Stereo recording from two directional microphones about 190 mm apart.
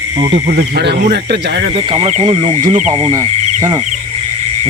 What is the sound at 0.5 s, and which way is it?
Speech, 60° right (ahead or behind).